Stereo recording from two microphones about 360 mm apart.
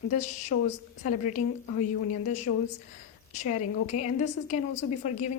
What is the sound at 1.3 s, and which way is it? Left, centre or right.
Speech, left.